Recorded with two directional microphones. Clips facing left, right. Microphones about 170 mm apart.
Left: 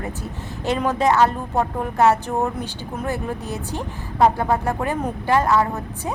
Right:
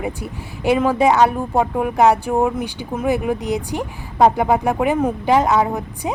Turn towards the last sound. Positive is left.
turn(degrees=-15)  # may be behind; listen again after turning